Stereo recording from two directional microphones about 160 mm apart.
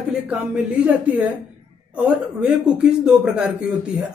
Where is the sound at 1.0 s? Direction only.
10° right (ahead or behind).